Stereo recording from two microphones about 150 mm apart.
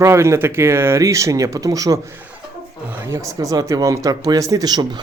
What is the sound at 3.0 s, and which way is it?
Speech, 20° right (ahead or behind).